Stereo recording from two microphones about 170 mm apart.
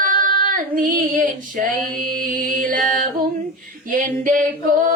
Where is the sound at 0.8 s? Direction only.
55° right (ahead or behind).